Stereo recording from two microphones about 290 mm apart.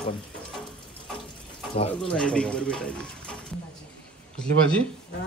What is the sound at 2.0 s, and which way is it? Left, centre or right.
Speech, centre.